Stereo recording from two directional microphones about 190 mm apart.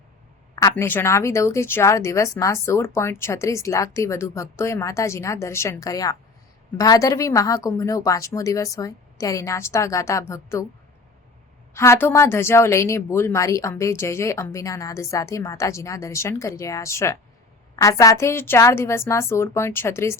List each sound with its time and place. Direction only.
0.8 s a woman's voice: 15° left (ahead or behind)
11.7 s a woman's voice: 15° left (ahead or behind)